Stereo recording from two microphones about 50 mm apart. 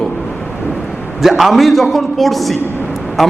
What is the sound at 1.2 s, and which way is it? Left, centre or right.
Speech, centre.